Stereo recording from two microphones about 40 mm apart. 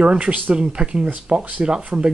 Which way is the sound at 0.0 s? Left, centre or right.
Right.